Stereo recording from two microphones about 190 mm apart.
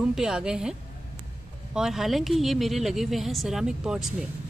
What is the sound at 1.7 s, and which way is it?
A woman's voice, centre (ahead or behind).